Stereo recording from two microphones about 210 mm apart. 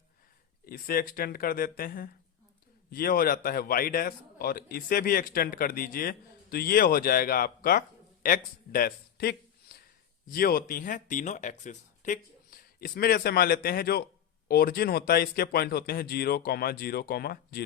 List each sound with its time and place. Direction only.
0.6 s a man's voice: 45° left (ahead or behind)